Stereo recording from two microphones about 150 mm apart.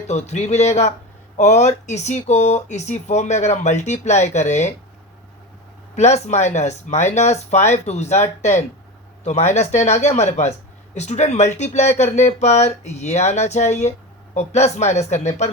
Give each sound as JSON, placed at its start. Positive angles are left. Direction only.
{"t": 0.1, "sound": "speech", "side_deg": 50}
{"t": 5.9, "sound": "speech", "side_deg": 50}